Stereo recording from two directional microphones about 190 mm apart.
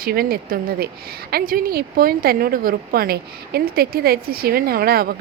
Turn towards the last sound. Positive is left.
turn(degrees=-55)  # may be behind; listen again after turning